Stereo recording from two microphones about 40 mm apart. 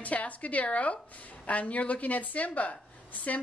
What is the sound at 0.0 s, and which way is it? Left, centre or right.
A woman's voice, left.